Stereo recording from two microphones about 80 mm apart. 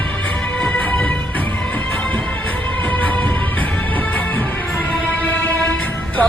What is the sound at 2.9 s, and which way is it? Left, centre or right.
Music, left.